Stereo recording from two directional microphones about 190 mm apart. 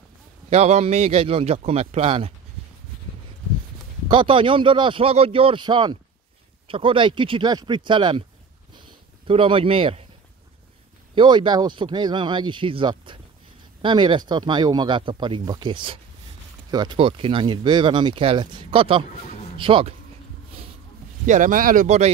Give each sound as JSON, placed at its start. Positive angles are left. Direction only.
{"t": 0.5, "sound": "speech", "side_deg": -35}
{"t": 4.1, "sound": "speech", "side_deg": -25}
{"t": 9.3, "sound": "speech", "side_deg": -30}
{"t": 11.1, "sound": "speech", "side_deg": -25}
{"t": 21.3, "sound": "speech", "side_deg": -45}